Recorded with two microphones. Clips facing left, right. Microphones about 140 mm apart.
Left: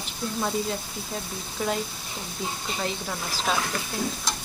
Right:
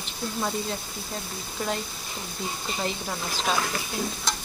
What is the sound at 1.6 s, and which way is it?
Speech, centre (ahead or behind).